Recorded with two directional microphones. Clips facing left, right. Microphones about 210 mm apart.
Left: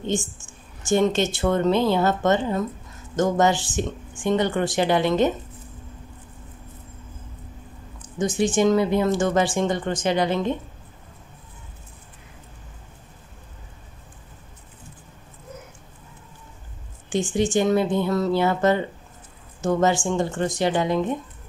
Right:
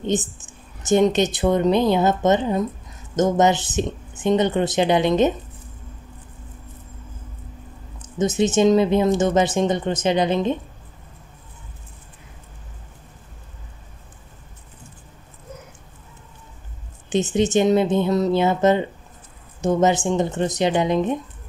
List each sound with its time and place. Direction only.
0.0 s speech: 20° right (ahead or behind)
8.0 s speech: 20° right (ahead or behind)
17.1 s speech: 20° right (ahead or behind)